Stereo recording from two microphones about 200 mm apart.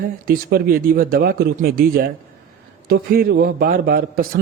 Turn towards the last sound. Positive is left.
turn(degrees=-50)  # may be behind; listen again after turning